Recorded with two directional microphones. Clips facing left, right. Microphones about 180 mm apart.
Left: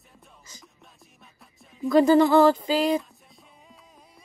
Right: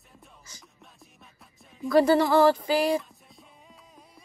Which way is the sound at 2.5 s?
20° left (ahead or behind).